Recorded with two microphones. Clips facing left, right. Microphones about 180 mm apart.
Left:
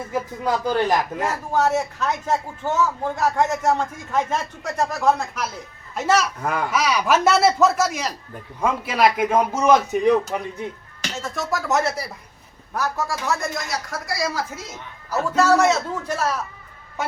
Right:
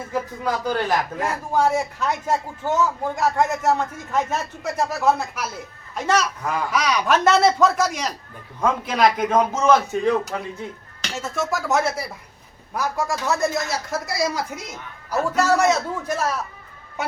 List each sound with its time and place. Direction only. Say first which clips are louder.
0.1 s a man's voice: left 1 dB; 15° left (ahead or behind)
1.2 s a man's voice: even; 10° right (ahead or behind)
5.9 s a man's voice: left 1 dB; 5° left (ahead or behind)
11.2 s speech: right 1 dB; centre (ahead or behind)
12.7 s a man's voice: right 1 dB; 15° right (ahead or behind)
13.5 s a man's voice: right 3 dB; 25° right (ahead or behind)